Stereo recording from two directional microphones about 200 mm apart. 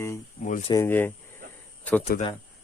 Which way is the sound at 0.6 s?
15° left (ahead or behind).